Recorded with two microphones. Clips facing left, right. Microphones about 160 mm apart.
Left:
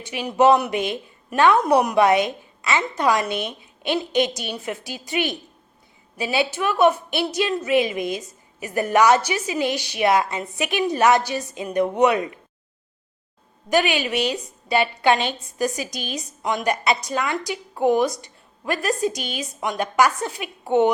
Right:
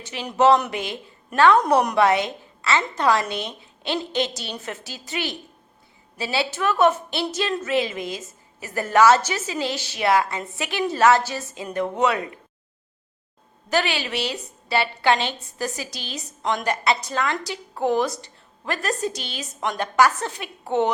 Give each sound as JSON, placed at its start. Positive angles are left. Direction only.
{"t": 0.0, "sound": "a woman's voice", "side_deg": 10}
{"t": 13.7, "sound": "a woman's voice", "side_deg": 15}